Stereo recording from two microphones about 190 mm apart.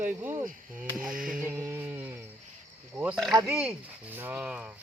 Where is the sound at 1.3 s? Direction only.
5° right (ahead or behind).